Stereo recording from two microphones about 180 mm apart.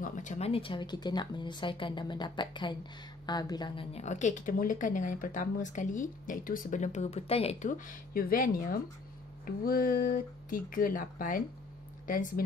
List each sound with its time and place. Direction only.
0.0 s speech: 45° left (ahead or behind)